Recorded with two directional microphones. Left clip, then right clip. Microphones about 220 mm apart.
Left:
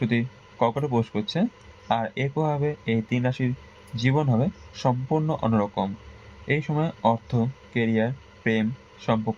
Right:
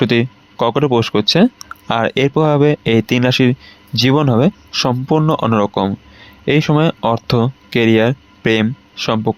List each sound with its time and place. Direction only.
0.0 s speech: 50° right (ahead or behind)